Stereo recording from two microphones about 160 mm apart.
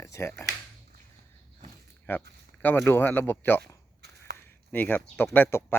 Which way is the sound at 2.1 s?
15° left (ahead or behind).